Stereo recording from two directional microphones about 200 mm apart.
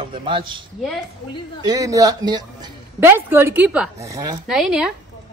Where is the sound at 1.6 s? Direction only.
15° right (ahead or behind).